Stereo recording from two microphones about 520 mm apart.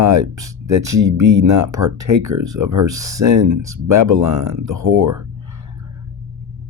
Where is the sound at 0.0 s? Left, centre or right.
Right.